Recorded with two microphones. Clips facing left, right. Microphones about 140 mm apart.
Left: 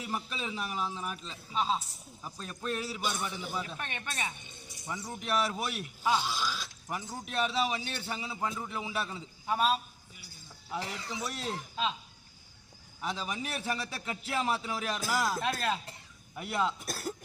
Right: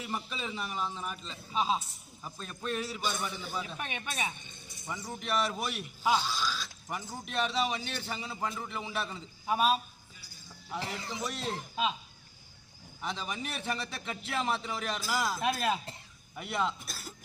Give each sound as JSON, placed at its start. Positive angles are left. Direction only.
{"t": 0.0, "sound": "a man's voice", "side_deg": 5}
{"t": 1.5, "sound": "speech", "side_deg": -10}
{"t": 2.2, "sound": "a man's voice", "side_deg": 0}
{"t": 3.8, "sound": "speech", "side_deg": -10}
{"t": 5.1, "sound": "a man's voice", "side_deg": 5}
{"t": 6.1, "sound": "speech", "side_deg": 15}
{"t": 6.9, "sound": "a man's voice", "side_deg": 5}
{"t": 9.5, "sound": "speech", "side_deg": -10}
{"t": 11.1, "sound": "a man's voice", "side_deg": 5}
{"t": 13.0, "sound": "a man's voice", "side_deg": 5}
{"t": 15.4, "sound": "speech", "side_deg": -15}
{"t": 16.3, "sound": "a man's voice", "side_deg": 5}
{"t": 16.8, "sound": "speech", "side_deg": 55}